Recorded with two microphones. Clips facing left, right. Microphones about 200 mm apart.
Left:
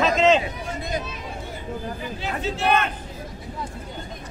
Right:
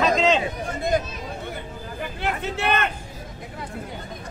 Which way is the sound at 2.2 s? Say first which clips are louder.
Left 1 dB; 60° right (ahead or behind).